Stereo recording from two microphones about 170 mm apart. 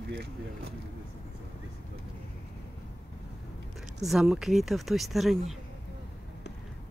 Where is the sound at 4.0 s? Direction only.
Centre (ahead or behind).